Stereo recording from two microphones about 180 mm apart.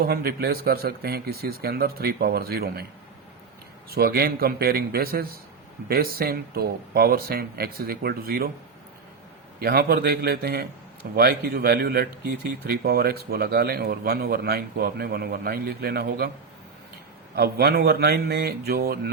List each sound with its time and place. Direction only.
0.0 s speech: 60° right (ahead or behind)
3.8 s speech: 60° right (ahead or behind)
9.6 s speech: 55° right (ahead or behind)
17.3 s speech: 60° right (ahead or behind)